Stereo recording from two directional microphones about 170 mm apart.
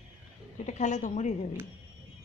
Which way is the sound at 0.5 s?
45° left (ahead or behind).